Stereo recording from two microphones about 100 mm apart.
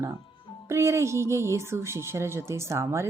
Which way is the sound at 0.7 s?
30° right (ahead or behind).